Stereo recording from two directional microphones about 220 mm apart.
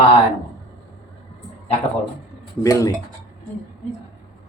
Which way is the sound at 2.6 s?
15° left (ahead or behind).